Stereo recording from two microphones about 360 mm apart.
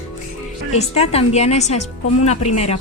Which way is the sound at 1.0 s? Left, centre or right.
Centre.